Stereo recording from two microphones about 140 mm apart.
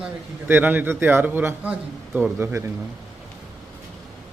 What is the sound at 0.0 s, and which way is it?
A man's voice, 10° right (ahead or behind).